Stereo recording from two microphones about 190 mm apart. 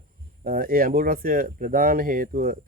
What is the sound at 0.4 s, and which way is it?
Speech, 50° right (ahead or behind).